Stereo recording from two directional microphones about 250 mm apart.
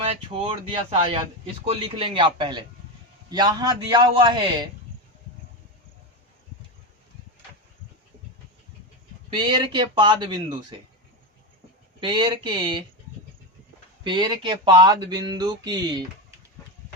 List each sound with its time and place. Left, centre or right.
0.0 s speech: right
1.6 s speech: right
9.3 s speech: centre
11.9 s speech: centre
14.0 s speech: centre